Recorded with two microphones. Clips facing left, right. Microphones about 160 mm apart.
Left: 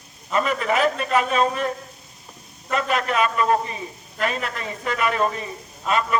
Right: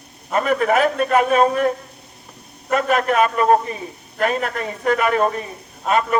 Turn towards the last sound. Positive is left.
turn(degrees=-50)  # may be behind; listen again after turning